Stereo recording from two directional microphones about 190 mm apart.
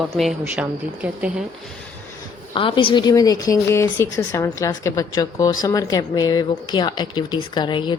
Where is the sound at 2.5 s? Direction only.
25° left (ahead or behind).